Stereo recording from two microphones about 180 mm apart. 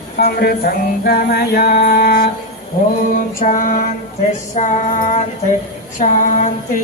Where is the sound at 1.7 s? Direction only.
50° left (ahead or behind).